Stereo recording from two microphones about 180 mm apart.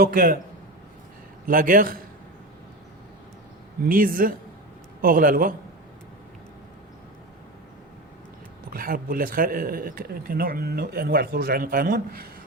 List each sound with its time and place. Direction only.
0.0 s speech: 55° right (ahead or behind)
1.5 s a man's voice: 50° right (ahead or behind)
3.8 s a man's voice: 50° right (ahead or behind)
8.7 s speech: 55° right (ahead or behind)